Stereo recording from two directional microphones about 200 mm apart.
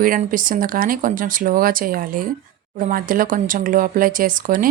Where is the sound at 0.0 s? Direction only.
45° right (ahead or behind).